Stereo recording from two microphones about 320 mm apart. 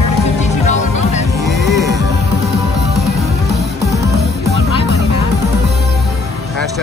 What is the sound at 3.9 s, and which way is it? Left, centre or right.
Music, right.